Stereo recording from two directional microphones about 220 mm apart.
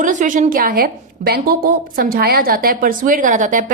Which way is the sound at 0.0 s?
35° right (ahead or behind).